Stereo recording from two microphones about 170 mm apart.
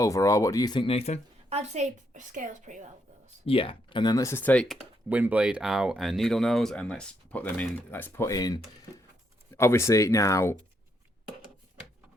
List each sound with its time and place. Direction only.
0.0 s speech: 20° left (ahead or behind); by 1.2 s 40° left (ahead or behind)
1.5 s a woman's voice: 40° right (ahead or behind)
3.4 s speech: 35° left (ahead or behind); by 4.8 s 10° left (ahead or behind)
5.0 s speech: 10° right (ahead or behind); by 10.6 s 15° left (ahead or behind)